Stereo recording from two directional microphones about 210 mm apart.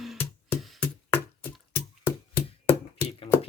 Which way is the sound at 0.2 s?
5° left (ahead or behind).